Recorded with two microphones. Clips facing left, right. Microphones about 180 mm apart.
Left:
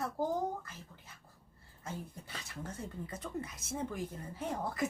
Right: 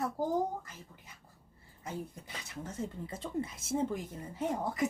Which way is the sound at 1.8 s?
20° right (ahead or behind).